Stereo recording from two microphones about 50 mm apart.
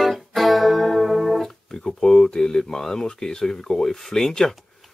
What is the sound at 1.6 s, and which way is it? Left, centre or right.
Speech, centre.